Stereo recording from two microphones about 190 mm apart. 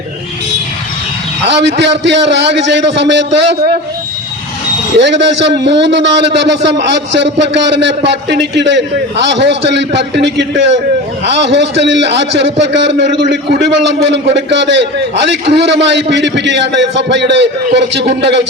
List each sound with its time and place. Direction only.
1.5 s a man's voice: 65° right (ahead or behind)
4.9 s a man's voice: 70° right (ahead or behind)